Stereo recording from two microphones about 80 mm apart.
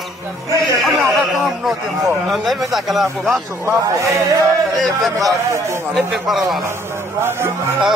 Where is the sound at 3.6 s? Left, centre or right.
Right.